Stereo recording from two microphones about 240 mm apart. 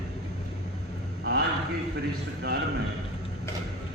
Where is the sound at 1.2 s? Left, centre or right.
Right.